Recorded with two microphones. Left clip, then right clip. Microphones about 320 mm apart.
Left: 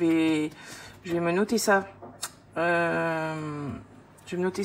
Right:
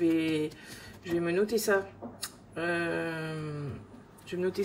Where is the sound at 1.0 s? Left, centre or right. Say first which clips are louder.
Left 3 dB; centre.